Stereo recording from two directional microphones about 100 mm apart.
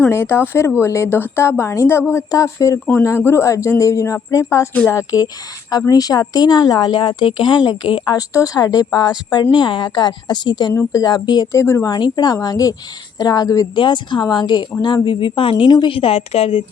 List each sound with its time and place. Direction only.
0.1 s speech: 25° left (ahead or behind); by 8.2 s 50° left (ahead or behind)
8.3 s speech: 35° left (ahead or behind)
11.5 s speech: 30° left (ahead or behind)
11.9 s speech: 50° left (ahead or behind)
13.7 s a woman's voice: 50° left (ahead or behind); by 16.6 s 75° left (ahead or behind)